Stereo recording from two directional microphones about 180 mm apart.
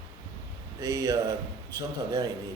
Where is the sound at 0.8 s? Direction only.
20° right (ahead or behind).